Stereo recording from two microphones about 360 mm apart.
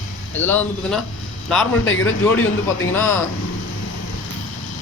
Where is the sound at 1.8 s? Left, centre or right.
Left.